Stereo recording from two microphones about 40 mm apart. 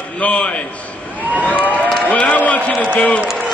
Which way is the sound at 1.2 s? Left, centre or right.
Right.